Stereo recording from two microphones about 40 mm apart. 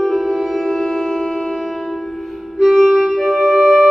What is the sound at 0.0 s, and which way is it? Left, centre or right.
Music, centre.